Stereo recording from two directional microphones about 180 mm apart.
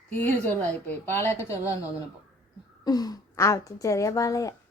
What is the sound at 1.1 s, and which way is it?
Speech, 15° left (ahead or behind).